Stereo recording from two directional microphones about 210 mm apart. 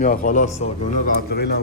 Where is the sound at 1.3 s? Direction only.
50° left (ahead or behind).